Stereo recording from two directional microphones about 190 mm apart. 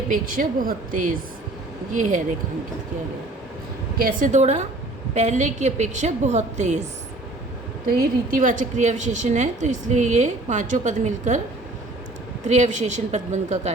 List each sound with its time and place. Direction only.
0.1 s a woman's voice: 45° right (ahead or behind)
3.9 s a woman's voice: 45° right (ahead or behind)
8.4 s a woman's voice: 40° right (ahead or behind)
12.5 s a woman's voice: 40° right (ahead or behind)